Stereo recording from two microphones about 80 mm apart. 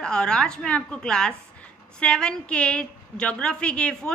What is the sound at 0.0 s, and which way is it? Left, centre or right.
A woman's voice, centre.